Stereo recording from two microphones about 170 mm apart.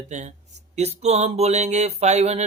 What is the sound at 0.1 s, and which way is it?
Speech, 45° right (ahead or behind).